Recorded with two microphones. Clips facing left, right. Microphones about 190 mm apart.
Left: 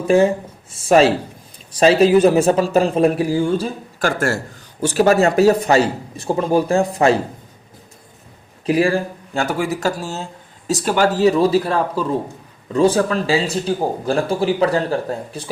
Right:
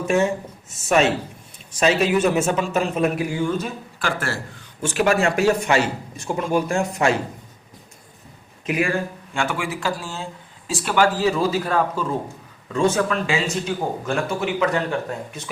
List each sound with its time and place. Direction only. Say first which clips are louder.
0.1 s speech: left 7 dB; 30° left (ahead or behind)
8.6 s speech: left 6 dB; 35° left (ahead or behind)